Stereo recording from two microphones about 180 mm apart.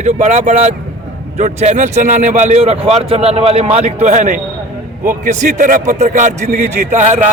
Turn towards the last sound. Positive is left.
turn(degrees=-45)  # may be behind; listen again after turning